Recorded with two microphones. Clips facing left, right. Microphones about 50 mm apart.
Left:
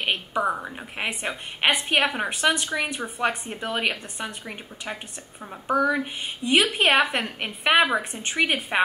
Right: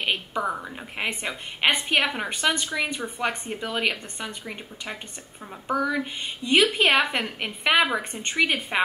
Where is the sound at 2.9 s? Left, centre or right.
Centre.